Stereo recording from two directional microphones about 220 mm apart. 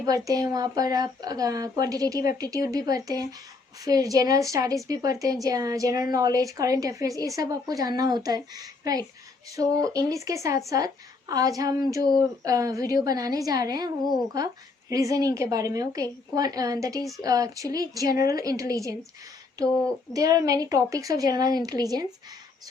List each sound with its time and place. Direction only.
0.0 s a woman's voice: 15° right (ahead or behind)
3.8 s a woman's voice: 15° right (ahead or behind)